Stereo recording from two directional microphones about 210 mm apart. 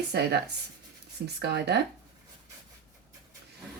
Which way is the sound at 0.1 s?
55° right (ahead or behind).